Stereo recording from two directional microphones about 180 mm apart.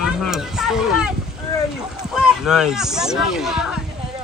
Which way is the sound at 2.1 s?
5° right (ahead or behind).